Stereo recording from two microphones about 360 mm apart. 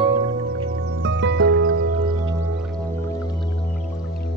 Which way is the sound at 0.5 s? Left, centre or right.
Right.